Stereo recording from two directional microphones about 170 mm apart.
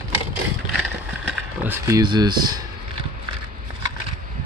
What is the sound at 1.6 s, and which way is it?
Speech, 15° right (ahead or behind).